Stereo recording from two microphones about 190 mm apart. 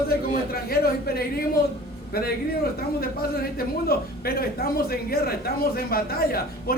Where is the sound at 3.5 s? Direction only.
50° left (ahead or behind).